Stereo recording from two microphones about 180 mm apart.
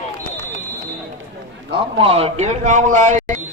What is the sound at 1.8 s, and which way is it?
A man's voice, 30° right (ahead or behind).